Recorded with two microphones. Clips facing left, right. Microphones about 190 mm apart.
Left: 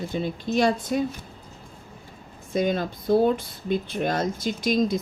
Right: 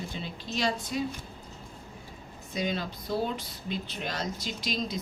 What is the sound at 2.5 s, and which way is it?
Speech, 50° left (ahead or behind).